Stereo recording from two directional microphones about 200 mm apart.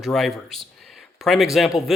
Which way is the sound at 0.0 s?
Centre (ahead or behind).